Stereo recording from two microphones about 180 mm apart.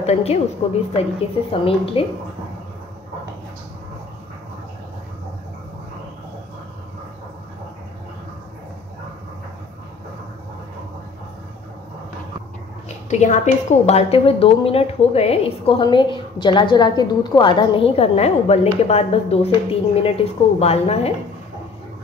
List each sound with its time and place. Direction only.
0.0 s a woman's voice: 35° left (ahead or behind)
12.8 s a woman's voice: 40° left (ahead or behind)